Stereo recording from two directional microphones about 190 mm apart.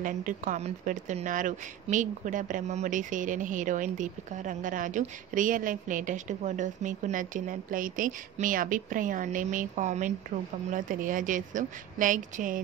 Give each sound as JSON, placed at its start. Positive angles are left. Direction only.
{"t": 0.0, "sound": "speech", "side_deg": -45}